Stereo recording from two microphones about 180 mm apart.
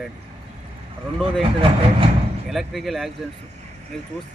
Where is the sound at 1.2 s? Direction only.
30° right (ahead or behind).